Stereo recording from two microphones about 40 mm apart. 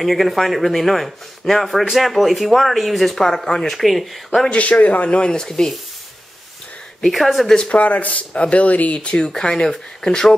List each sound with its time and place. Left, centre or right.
0.0 s speech: centre
3.2 s speech: centre
4.5 s speech: left
5.2 s speech: centre
7.0 s speech: centre
7.7 s speech: left; by 10.3 s centre